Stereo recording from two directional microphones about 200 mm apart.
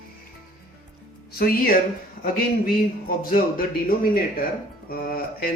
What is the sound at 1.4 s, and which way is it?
Speech, 45° left (ahead or behind).